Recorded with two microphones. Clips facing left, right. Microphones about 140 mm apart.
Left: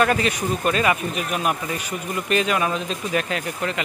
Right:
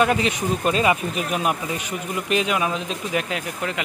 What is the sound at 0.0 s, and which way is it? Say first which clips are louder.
Speech: even; 15° right (ahead or behind).